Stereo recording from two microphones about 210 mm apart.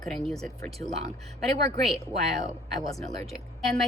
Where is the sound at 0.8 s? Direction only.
15° left (ahead or behind).